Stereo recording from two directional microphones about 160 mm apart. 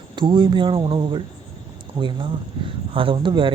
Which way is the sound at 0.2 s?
30° right (ahead or behind).